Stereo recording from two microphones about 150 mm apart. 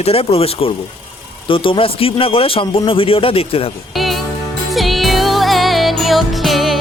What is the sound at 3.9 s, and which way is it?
Music, centre (ahead or behind).